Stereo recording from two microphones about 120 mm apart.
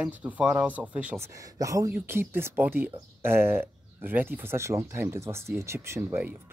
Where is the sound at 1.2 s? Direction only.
25° right (ahead or behind).